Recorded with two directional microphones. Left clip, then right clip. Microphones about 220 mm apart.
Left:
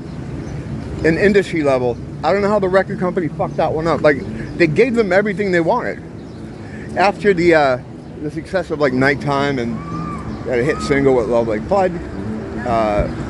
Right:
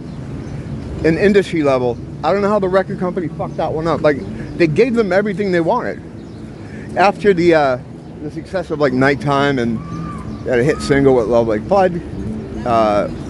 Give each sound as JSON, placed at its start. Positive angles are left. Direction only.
{"t": 1.0, "sound": "a man's voice", "side_deg": -15}
{"t": 3.7, "sound": "a man's voice", "side_deg": -5}
{"t": 7.0, "sound": "a man's voice", "side_deg": -15}